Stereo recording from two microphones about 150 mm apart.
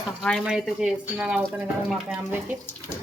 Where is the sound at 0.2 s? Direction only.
Centre (ahead or behind).